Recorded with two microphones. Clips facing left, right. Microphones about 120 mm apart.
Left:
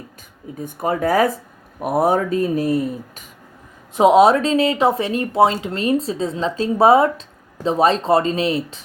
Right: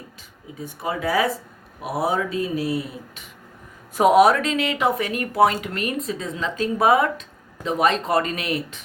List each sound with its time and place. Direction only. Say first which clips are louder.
0.6 s speech: left 6 dB; 50° left (ahead or behind)
3.9 s speech: left 3 dB; 25° left (ahead or behind)